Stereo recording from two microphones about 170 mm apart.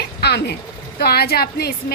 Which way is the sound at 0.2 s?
70° left (ahead or behind).